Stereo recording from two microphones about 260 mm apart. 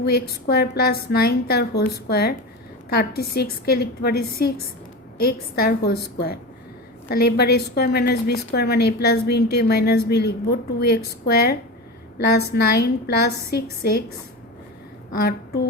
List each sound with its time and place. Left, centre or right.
0.0 s a woman's voice: left
12.8 s a woman's voice: left
15.1 s a woman's voice: left